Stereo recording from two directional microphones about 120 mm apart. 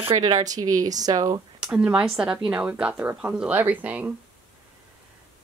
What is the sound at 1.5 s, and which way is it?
Speech, 15° right (ahead or behind).